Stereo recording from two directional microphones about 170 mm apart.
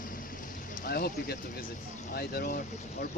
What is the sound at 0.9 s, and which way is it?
Speech, 65° left (ahead or behind).